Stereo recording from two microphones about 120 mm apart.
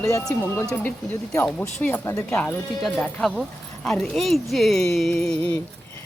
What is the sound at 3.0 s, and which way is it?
Speech, 5° left (ahead or behind).